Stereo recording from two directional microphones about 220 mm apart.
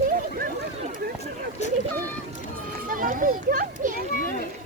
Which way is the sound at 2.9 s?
40° right (ahead or behind).